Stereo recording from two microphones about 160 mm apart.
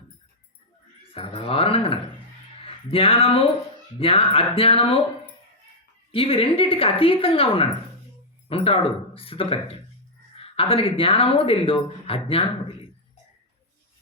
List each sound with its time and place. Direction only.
1.1 s speech: 35° left (ahead or behind)